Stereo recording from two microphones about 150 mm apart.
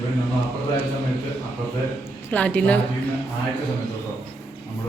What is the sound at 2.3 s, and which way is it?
Speech, 10° left (ahead or behind).